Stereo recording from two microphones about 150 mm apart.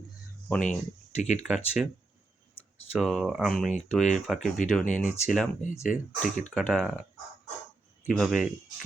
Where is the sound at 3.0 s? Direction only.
Centre (ahead or behind).